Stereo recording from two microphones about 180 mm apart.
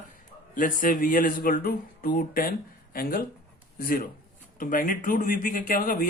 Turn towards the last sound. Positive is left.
turn(degrees=50)  # may be behind; listen again after turning